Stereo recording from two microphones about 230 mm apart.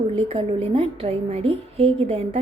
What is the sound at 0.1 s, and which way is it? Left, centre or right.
A woman's voice, right.